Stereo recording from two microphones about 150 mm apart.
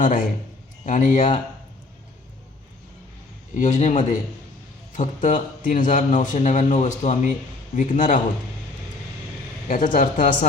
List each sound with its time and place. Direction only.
0.0 s a man's voice: 60° left (ahead or behind)
3.5 s a man's voice: 55° left (ahead or behind)
9.6 s a man's voice: 60° left (ahead or behind)